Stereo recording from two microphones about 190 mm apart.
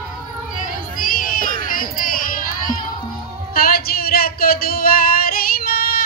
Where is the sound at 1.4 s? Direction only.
45° right (ahead or behind).